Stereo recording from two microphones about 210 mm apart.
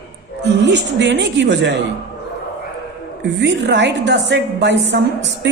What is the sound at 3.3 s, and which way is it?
A woman's voice, 55° right (ahead or behind).